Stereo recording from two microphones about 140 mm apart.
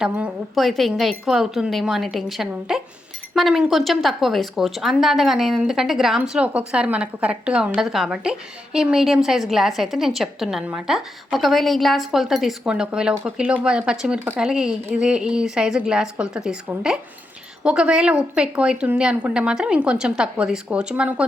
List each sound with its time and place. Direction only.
0.0 s a woman's voice: centre (ahead or behind)